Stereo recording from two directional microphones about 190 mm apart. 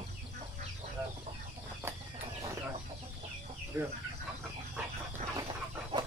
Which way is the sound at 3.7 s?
10° right (ahead or behind).